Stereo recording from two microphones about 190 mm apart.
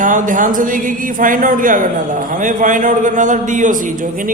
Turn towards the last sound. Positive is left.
turn(degrees=-45)  # may be behind; listen again after turning